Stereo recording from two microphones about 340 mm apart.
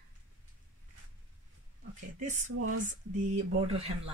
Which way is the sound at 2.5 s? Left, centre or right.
Right.